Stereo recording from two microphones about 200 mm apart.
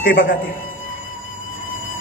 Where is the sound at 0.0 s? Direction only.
45° left (ahead or behind).